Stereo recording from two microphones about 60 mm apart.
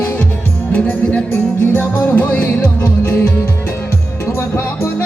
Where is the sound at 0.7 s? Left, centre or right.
Left.